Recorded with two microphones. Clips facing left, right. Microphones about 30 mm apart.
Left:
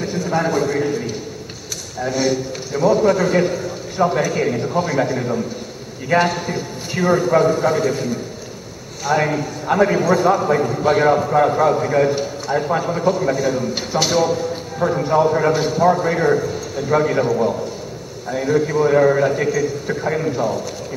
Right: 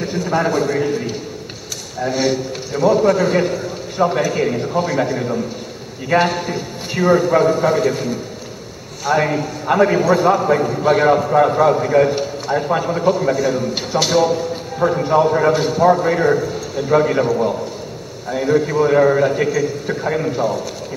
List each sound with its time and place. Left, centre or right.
0.0 s a man's voice: centre